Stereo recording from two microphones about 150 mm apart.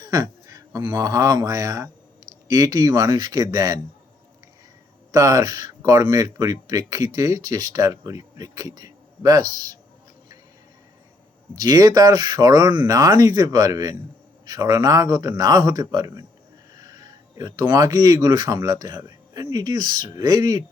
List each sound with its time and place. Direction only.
0.0 s speech: 25° right (ahead or behind)
5.1 s speech: 20° right (ahead or behind)
11.5 s speech: 25° right (ahead or behind)